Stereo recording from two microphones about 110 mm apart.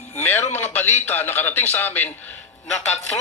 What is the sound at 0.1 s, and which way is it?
Music, 20° left (ahead or behind).